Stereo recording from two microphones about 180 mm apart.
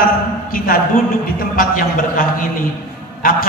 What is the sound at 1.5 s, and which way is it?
A man's voice, 50° left (ahead or behind).